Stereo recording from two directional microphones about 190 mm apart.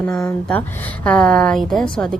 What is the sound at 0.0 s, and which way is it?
A woman's voice, 5° left (ahead or behind).